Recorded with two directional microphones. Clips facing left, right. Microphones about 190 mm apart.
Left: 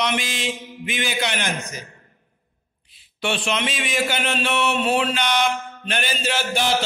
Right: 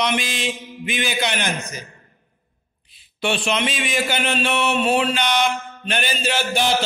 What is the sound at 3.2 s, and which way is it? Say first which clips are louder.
A man's voice: right 2 dB; 15° right (ahead or behind).